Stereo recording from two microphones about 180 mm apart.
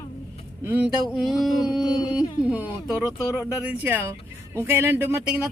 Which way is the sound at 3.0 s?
15° left (ahead or behind).